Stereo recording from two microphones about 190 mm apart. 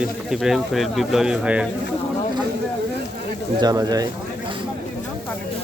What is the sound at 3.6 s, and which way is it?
Speech, 20° right (ahead or behind).